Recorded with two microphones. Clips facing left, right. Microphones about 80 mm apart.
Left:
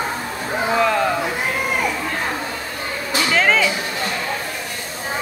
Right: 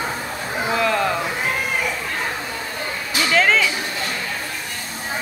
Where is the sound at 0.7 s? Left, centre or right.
Centre.